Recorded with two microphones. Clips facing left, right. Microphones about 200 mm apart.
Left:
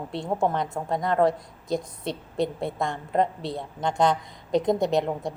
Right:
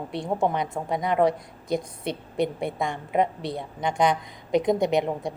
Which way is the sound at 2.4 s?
20° right (ahead or behind).